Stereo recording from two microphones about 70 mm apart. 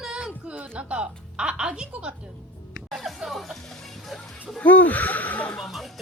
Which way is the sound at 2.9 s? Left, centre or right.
Centre.